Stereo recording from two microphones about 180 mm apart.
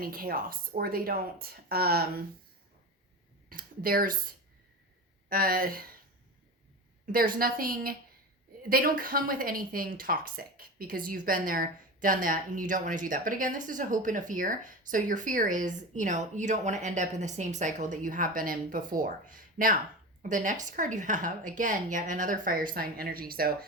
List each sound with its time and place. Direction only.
0.0 s speech: 55° right (ahead or behind)
3.5 s speech: 50° right (ahead or behind)
5.3 s speech: 55° right (ahead or behind)
7.0 s speech: 50° right (ahead or behind)